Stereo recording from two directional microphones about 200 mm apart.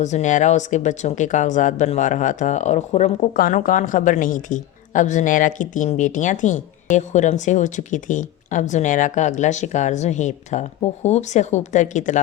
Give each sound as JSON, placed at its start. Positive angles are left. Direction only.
{"t": 0.0, "sound": "a woman's voice", "side_deg": 35}